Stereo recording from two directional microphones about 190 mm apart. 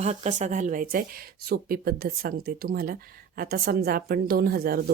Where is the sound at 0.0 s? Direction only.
35° right (ahead or behind).